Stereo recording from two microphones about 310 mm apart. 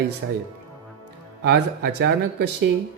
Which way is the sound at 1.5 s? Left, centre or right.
Right.